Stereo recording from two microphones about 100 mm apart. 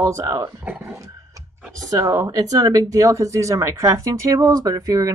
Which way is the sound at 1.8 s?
35° right (ahead or behind).